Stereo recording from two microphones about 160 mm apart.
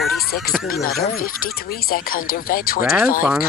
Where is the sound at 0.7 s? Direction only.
60° left (ahead or behind).